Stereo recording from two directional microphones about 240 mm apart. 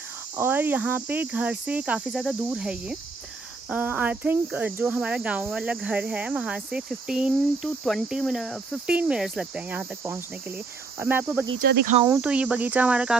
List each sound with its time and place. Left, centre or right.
0.4 s speech: centre
11.0 s cricket: centre
11.7 s speech: right
12.1 s speech: centre